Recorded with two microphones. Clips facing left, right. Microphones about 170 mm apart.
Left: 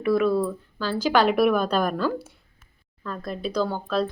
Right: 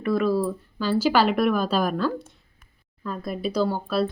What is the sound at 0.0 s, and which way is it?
Speech, centre (ahead or behind).